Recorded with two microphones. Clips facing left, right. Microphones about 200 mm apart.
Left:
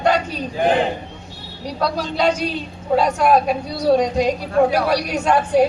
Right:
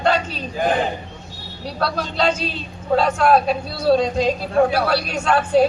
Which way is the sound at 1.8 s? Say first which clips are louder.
Left 2 dB; 15° left (ahead or behind).